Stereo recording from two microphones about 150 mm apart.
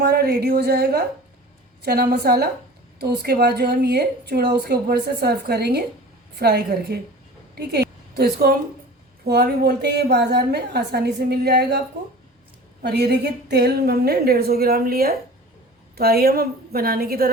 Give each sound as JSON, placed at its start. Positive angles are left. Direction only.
{"t": 0.0, "sound": "a woman's voice", "side_deg": -90}
{"t": 12.8, "sound": "a woman's voice", "side_deg": -90}